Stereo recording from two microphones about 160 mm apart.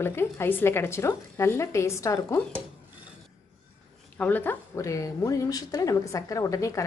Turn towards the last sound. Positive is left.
turn(degrees=20)  # may be behind; listen again after turning